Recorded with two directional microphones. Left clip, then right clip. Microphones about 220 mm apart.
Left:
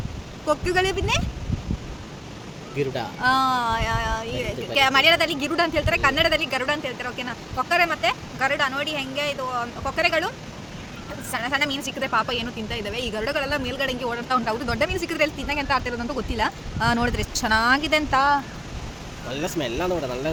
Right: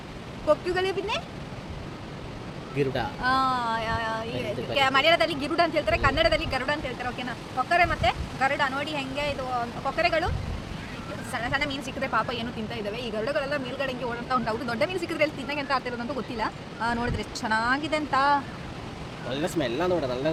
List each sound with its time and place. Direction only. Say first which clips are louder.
0.4 s speech: left 2 dB; 35° left (ahead or behind)
2.7 s speech: left 1 dB; 5° left (ahead or behind)
3.2 s speech: left 5 dB; 35° left (ahead or behind)
19.3 s speech: left 1 dB; 15° left (ahead or behind)